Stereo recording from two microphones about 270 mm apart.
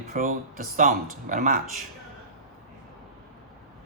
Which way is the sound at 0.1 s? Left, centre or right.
Right.